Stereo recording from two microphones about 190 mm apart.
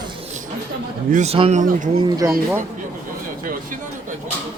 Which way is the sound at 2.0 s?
20° right (ahead or behind).